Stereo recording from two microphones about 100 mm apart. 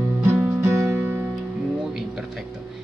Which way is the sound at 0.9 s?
20° right (ahead or behind).